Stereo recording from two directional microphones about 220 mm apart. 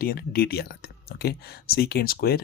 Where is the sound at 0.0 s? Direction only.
45° left (ahead or behind).